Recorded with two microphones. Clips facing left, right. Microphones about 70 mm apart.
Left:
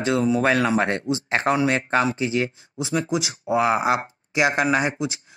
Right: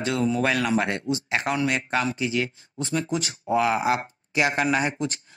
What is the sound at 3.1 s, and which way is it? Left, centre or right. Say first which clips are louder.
Speech: left 2 dB; centre.